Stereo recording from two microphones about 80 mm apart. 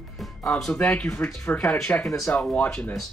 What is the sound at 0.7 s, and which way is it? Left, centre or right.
Speech, centre.